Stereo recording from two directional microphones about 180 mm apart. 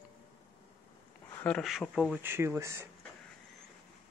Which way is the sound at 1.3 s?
5° left (ahead or behind).